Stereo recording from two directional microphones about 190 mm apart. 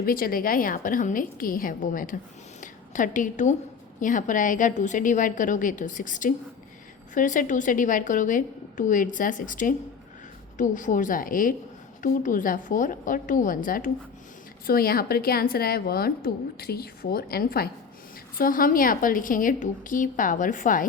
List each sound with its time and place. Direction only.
0.0 s a woman's voice: 50° left (ahead or behind)
2.6 s a sound: 40° left (ahead or behind)
4.0 s a woman's voice: 45° left (ahead or behind)